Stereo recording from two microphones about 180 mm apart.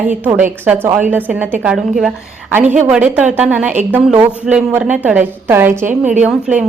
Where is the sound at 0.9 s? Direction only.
10° right (ahead or behind).